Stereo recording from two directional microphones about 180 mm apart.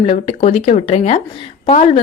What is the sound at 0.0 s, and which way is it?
Speech, 30° left (ahead or behind).